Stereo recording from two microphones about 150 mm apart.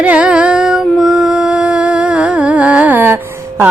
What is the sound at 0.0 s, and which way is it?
Music, 10° right (ahead or behind).